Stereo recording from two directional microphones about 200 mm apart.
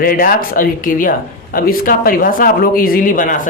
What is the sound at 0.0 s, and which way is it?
Speech, 45° left (ahead or behind).